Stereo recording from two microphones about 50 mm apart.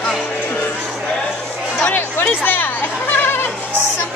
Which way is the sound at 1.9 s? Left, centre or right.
Left.